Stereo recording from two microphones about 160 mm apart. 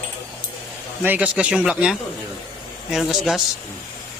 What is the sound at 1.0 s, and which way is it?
Speech, 10° right (ahead or behind).